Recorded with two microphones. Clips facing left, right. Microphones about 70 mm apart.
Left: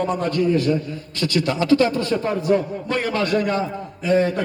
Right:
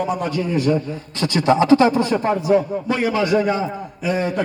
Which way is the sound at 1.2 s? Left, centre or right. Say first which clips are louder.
Right 5 dB; right.